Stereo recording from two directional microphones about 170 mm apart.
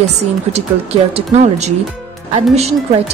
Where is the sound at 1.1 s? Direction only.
40° right (ahead or behind).